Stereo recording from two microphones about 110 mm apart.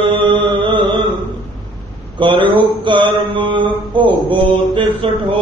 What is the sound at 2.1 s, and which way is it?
Mantra, 45° right (ahead or behind).